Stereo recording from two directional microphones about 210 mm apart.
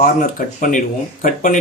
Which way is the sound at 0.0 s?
40° left (ahead or behind).